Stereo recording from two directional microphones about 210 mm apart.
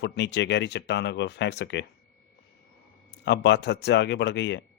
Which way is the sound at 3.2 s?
55° left (ahead or behind).